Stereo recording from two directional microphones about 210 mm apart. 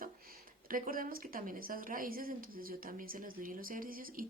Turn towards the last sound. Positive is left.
turn(degrees=-40)  # may be behind; listen again after turning